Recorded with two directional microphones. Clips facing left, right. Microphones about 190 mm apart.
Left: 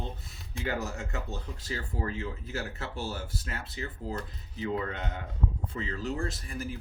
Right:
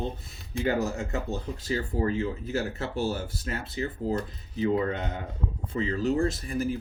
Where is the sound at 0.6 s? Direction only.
25° right (ahead or behind).